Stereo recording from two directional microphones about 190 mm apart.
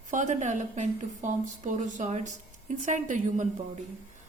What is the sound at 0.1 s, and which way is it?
A woman's voice, 40° right (ahead or behind).